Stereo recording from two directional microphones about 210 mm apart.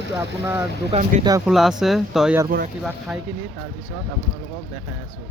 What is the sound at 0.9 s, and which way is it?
Speech, 30° right (ahead or behind).